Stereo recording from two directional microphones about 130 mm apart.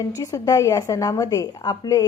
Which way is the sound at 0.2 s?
25° left (ahead or behind).